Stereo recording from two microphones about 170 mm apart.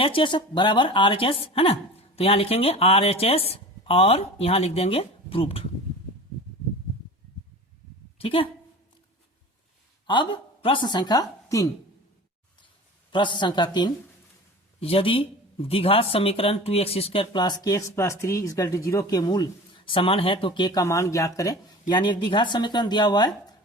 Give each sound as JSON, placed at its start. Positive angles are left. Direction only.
{"t": 0.0, "sound": "a woman's voice", "side_deg": 30}
{"t": 8.2, "sound": "a woman's voice", "side_deg": 30}
{"t": 10.1, "sound": "a woman's voice", "side_deg": 30}
{"t": 13.1, "sound": "a sound", "side_deg": 30}
{"t": 13.4, "sound": "speech", "side_deg": 25}